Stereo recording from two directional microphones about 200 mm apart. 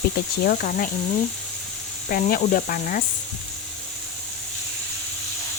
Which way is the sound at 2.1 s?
45° left (ahead or behind).